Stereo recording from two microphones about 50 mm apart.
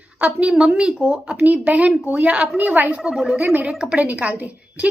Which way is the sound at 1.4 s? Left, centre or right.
Right.